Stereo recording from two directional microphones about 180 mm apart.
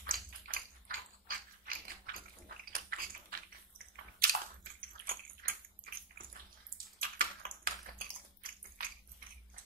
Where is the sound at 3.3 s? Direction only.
55° right (ahead or behind).